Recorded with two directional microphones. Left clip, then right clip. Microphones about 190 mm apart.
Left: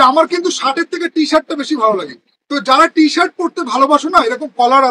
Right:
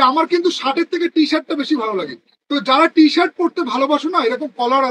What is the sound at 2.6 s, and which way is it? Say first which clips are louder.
Speech: left 2 dB; 20° left (ahead or behind).